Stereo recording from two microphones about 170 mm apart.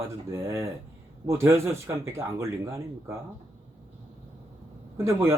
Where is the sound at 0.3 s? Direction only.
15° right (ahead or behind).